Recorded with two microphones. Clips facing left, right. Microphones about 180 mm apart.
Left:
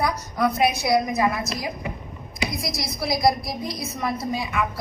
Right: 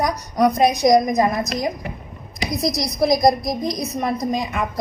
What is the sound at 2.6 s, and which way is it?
A woman's voice, 20° right (ahead or behind).